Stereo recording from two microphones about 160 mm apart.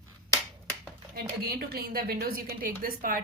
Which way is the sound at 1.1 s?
70° right (ahead or behind).